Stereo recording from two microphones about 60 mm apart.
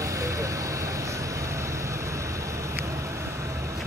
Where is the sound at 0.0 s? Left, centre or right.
Right.